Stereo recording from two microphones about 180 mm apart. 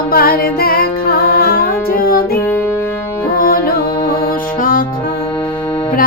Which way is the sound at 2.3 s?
10° left (ahead or behind).